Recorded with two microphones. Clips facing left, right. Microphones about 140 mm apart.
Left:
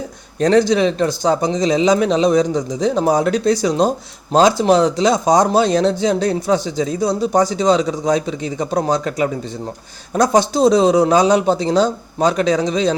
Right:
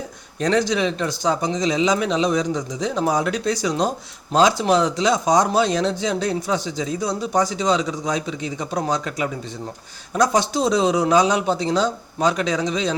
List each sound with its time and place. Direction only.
0.3 s a man's voice: 40° left (ahead or behind)